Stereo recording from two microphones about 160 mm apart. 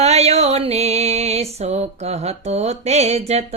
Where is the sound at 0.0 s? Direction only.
40° right (ahead or behind).